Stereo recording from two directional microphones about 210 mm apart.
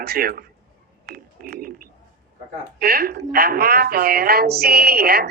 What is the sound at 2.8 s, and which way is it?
A woman's voice, 45° right (ahead or behind).